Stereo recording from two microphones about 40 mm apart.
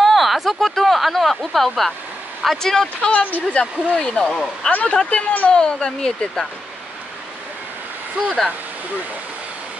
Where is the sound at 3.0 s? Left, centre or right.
Left.